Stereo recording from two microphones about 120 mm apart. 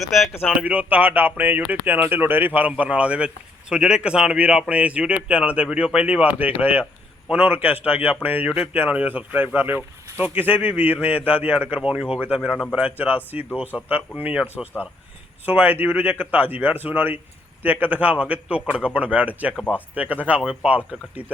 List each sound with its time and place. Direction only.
0.0 s speech: centre (ahead or behind)
0.6 s speech: 15° right (ahead or behind)
15.4 s speech: 15° right (ahead or behind)
19.5 s speech: 10° left (ahead or behind)
20.0 s speech: 10° right (ahead or behind)